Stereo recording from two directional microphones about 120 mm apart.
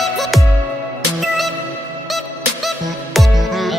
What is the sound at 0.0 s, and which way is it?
Music, centre (ahead or behind).